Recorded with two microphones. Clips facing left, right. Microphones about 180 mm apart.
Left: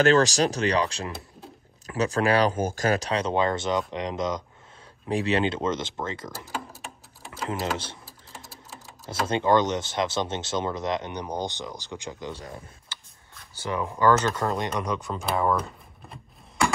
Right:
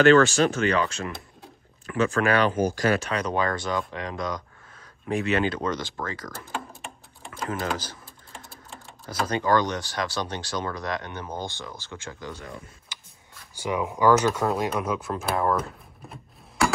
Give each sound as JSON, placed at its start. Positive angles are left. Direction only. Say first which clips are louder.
{"t": 0.0, "sound": "speech", "louder": "right 3 dB", "side_deg": 40}
{"t": 2.6, "sound": "speech", "louder": "right 2 dB", "side_deg": 45}
{"t": 5.1, "sound": "speech", "louder": "even", "side_deg": 30}
{"t": 6.3, "sound": "a sound", "louder": "even", "side_deg": 5}
{"t": 7.7, "sound": "speech", "louder": "even", "side_deg": 25}
{"t": 8.0, "sound": "sewing machine", "louder": "even", "side_deg": 5}
{"t": 9.2, "sound": "speech", "louder": "left 1 dB", "side_deg": 25}
{"t": 12.9, "sound": "a sound", "louder": "left 2 dB", "side_deg": -15}
{"t": 13.6, "sound": "speech", "louder": "right 1 dB", "side_deg": -10}